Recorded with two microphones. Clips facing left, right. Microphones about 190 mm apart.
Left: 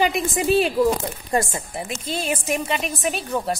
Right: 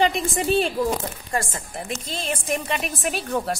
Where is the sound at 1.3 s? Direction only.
20° left (ahead or behind).